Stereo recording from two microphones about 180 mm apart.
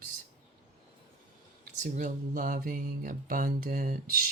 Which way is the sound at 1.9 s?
45° right (ahead or behind).